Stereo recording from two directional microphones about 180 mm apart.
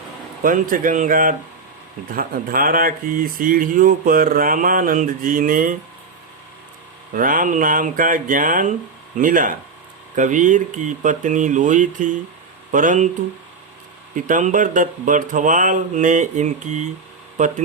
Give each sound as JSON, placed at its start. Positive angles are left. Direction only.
{"t": 0.4, "sound": "speech", "side_deg": -50}
{"t": 7.1, "sound": "speech", "side_deg": -50}
{"t": 14.2, "sound": "speech", "side_deg": -45}